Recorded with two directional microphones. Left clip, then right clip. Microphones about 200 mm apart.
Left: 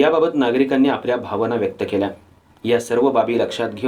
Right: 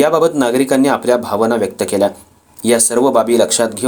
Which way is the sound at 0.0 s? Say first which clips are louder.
Right 4 dB; 45° right (ahead or behind).